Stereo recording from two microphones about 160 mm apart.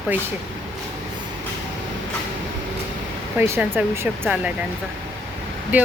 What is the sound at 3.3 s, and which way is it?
A woman's voice, 15° right (ahead or behind).